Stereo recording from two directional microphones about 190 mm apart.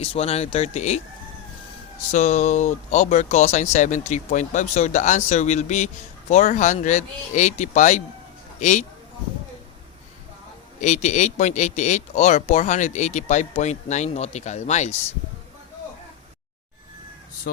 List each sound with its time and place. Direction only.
0.0 s speech: 30° left (ahead or behind)
2.0 s a man's voice: 40° left (ahead or behind)
10.8 s speech: 40° left (ahead or behind)